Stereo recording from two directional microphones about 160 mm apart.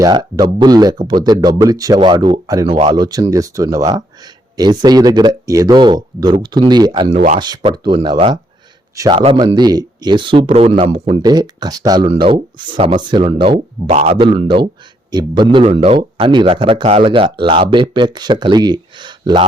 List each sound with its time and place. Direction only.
0.0 s speech: 25° right (ahead or behind)
7.1 s speech: 40° right (ahead or behind)
7.3 s speech: 25° right (ahead or behind)
12.0 s speech: 35° right (ahead or behind)
16.1 s speech: 30° right (ahead or behind)